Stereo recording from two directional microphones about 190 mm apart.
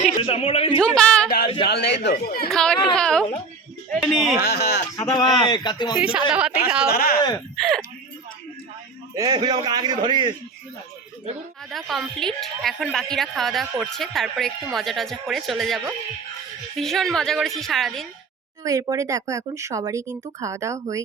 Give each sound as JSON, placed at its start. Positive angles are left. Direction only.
{"t": 0.0, "sound": "a sound", "side_deg": 30}
{"t": 0.8, "sound": "a sound", "side_deg": 5}
{"t": 1.6, "sound": "a man's voice", "side_deg": 60}
{"t": 2.5, "sound": "speech", "side_deg": 5}
{"t": 4.4, "sound": "speech", "side_deg": 60}
{"t": 4.9, "sound": "a man's voice", "side_deg": 20}
{"t": 6.0, "sound": "speech", "side_deg": -5}
{"t": 6.8, "sound": "speech", "side_deg": 55}
{"t": 9.1, "sound": "a man's voice", "side_deg": -20}
{"t": 11.7, "sound": "speech", "side_deg": 0}
{"t": 18.6, "sound": "speech", "side_deg": -15}